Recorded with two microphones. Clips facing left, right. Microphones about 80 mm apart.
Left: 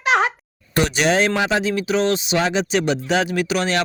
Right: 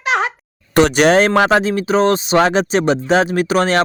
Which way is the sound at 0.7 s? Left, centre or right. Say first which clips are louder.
Right 7 dB; right.